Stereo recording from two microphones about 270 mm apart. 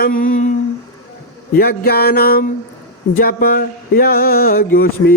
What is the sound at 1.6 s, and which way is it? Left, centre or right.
Speech, left.